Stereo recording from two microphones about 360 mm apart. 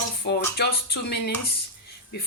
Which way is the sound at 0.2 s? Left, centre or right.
Left.